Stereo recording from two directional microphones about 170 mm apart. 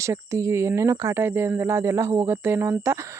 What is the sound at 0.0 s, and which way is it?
Speech, 15° right (ahead or behind).